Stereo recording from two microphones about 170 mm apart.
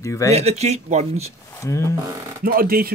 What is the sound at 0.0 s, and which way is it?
Speech, 20° left (ahead or behind).